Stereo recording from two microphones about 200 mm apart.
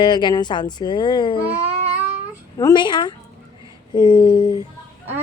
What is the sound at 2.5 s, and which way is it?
Speech, 20° left (ahead or behind).